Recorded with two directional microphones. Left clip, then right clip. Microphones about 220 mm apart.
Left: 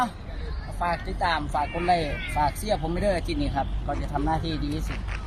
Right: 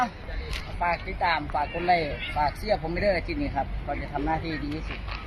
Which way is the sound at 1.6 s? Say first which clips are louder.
Left 1 dB; 35° left (ahead or behind).